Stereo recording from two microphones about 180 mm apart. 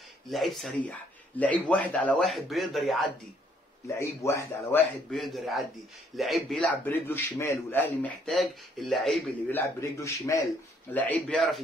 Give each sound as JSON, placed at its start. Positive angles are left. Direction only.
{"t": 0.3, "sound": "a man's voice", "side_deg": 0}
{"t": 3.8, "sound": "a man's voice", "side_deg": 15}
{"t": 5.1, "sound": "a man's voice", "side_deg": 0}
{"t": 8.3, "sound": "speech", "side_deg": 0}
{"t": 9.5, "sound": "a man's voice", "side_deg": 15}